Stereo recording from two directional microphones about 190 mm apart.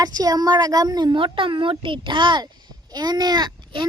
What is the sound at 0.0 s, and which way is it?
A child's voice, 20° right (ahead or behind).